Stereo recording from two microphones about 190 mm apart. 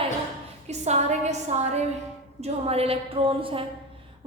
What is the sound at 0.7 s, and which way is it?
A woman's voice, 35° right (ahead or behind).